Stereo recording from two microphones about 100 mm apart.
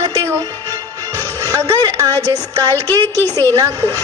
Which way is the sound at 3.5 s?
35° right (ahead or behind).